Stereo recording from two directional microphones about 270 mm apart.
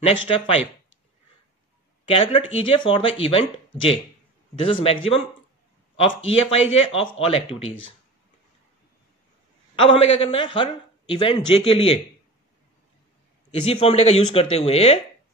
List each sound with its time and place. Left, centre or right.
0.0 s a man's voice: centre
2.0 s a man's voice: left
6.5 s a man's voice: left
9.8 s a man's voice: left
13.5 s a man's voice: left